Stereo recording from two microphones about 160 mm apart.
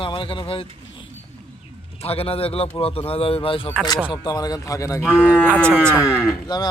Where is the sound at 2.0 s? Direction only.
40° left (ahead or behind).